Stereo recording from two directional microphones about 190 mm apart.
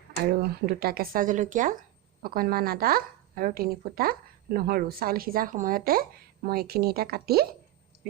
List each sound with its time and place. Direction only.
0.2 s a woman's voice: 55° right (ahead or behind)